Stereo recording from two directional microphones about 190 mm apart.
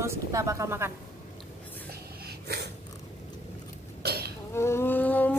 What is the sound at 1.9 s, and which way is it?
Snort, 60° right (ahead or behind).